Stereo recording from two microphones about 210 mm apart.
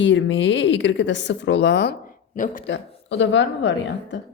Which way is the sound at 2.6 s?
60° left (ahead or behind).